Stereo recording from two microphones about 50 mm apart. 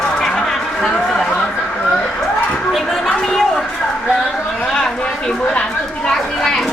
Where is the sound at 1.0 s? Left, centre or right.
Centre.